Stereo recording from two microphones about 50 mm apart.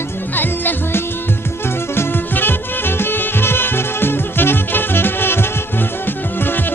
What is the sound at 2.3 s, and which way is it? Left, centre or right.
Music, left.